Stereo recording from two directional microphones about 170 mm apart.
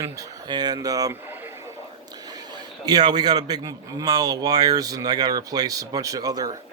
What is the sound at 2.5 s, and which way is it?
A man's voice, 25° right (ahead or behind).